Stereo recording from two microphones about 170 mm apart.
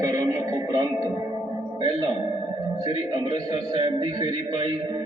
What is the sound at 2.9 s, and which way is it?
Music, 25° right (ahead or behind).